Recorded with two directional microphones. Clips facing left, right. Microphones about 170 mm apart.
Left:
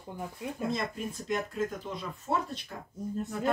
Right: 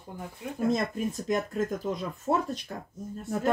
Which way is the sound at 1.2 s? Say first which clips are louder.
Right 1 dB; 45° right (ahead or behind).